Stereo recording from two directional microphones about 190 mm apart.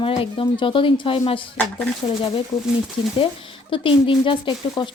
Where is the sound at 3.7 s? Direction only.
25° left (ahead or behind).